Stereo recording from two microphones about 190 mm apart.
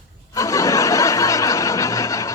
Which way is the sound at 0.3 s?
15° left (ahead or behind).